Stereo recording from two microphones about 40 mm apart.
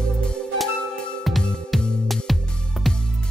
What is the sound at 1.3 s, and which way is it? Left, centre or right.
Music, centre.